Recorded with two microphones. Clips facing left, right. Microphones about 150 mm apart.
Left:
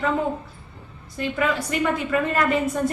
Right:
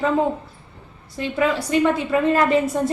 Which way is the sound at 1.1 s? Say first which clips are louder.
Right 3 dB; 25° right (ahead or behind).